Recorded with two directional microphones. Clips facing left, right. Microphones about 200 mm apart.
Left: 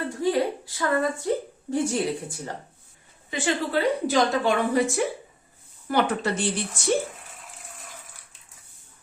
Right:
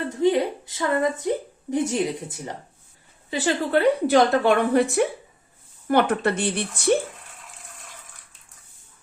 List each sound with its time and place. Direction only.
0.1 s a sound: 20° right (ahead or behind)
1.7 s a woman's voice: 20° right (ahead or behind)
3.2 s a woman's voice: 35° right (ahead or behind)
3.7 s a woman's voice: 60° right (ahead or behind)